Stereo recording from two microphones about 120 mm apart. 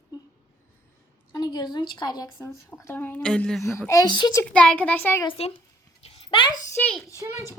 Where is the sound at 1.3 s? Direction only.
35° left (ahead or behind).